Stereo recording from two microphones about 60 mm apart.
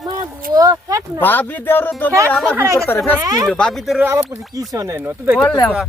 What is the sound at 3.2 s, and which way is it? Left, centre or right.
Speech, right.